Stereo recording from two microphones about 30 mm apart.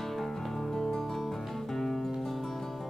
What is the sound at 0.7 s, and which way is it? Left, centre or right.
Music, centre.